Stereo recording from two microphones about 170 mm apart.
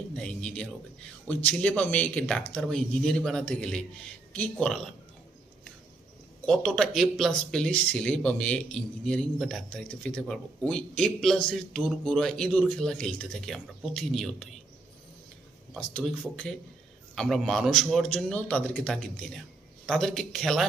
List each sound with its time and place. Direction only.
0.2 s a man's voice: 5° left (ahead or behind)
6.4 s speech: 5° left (ahead or behind)
15.7 s speech: 5° left (ahead or behind)